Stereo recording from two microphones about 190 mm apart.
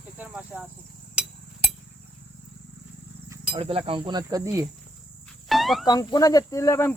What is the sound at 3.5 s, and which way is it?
Speech, 30° right (ahead or behind).